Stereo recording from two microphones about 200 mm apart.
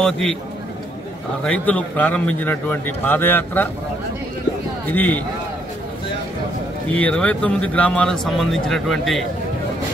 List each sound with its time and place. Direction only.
0.0 s speech: 5° left (ahead or behind)
1.4 s a man's voice: 5° left (ahead or behind)
4.9 s a man's voice: 5° left (ahead or behind)
6.9 s speech: 5° left (ahead or behind)